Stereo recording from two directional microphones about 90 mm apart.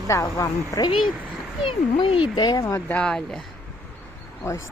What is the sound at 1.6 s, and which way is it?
Speech, 70° left (ahead or behind).